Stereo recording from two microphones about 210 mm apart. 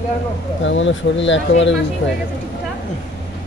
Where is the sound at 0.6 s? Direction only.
60° left (ahead or behind).